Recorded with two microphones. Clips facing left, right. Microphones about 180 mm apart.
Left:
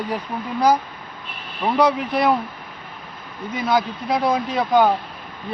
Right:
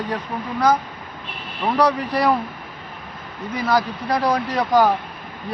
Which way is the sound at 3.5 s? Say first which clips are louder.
Even; centre (ahead or behind).